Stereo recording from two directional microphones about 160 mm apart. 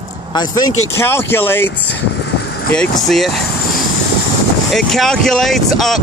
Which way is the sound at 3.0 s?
Centre (ahead or behind).